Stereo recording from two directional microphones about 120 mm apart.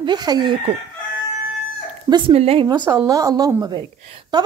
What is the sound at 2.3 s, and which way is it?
Speech, 55° right (ahead or behind).